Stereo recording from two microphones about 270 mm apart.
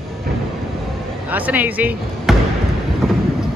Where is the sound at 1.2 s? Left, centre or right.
Centre.